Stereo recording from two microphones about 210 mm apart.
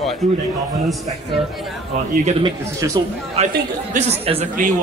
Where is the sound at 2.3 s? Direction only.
25° right (ahead or behind).